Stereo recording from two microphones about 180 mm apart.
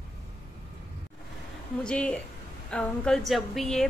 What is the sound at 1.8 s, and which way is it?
A woman's voice, 5° left (ahead or behind).